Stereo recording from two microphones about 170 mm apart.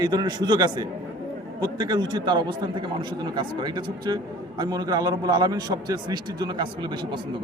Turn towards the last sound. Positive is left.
turn(degrees=-25)  # may be behind; listen again after turning